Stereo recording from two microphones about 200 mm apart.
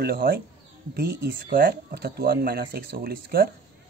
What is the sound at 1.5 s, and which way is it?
Speech, 45° right (ahead or behind).